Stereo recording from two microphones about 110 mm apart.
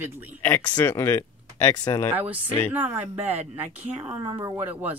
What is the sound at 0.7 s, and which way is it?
Speech, 20° left (ahead or behind).